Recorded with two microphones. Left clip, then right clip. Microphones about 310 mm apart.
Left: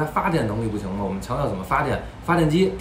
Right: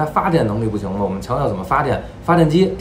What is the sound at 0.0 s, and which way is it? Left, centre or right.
Speech, centre.